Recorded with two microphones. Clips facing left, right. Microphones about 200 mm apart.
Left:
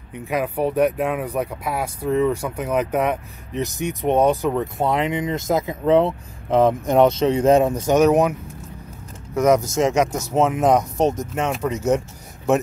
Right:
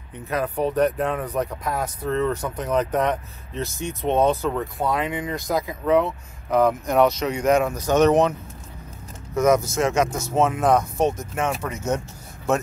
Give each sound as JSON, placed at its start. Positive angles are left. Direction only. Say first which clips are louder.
{"t": 0.1, "sound": "speech", "louder": "left 2 dB", "side_deg": 10}
{"t": 7.9, "sound": "speech", "louder": "left 1 dB", "side_deg": 10}